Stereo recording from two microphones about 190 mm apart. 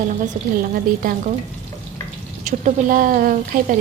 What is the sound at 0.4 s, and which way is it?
Speech, 45° right (ahead or behind).